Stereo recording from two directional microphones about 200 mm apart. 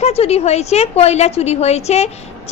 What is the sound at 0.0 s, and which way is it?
A woman's voice, 30° left (ahead or behind).